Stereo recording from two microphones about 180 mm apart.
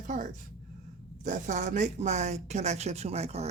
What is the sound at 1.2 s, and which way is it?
Speech, 45° right (ahead or behind).